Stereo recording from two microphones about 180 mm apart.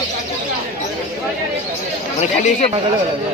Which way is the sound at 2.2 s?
40° left (ahead or behind).